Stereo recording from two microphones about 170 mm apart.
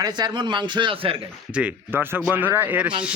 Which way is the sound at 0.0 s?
25° right (ahead or behind).